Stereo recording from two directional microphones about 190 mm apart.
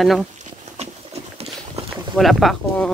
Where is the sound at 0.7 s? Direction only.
35° right (ahead or behind).